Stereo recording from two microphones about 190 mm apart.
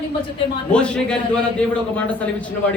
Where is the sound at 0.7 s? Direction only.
5° left (ahead or behind).